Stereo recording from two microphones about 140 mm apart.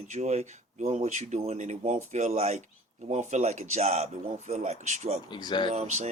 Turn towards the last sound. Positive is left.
turn(degrees=-50)  # may be behind; listen again after turning